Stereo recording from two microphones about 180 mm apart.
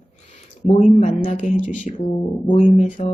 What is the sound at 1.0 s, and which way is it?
Speech, 45° left (ahead or behind).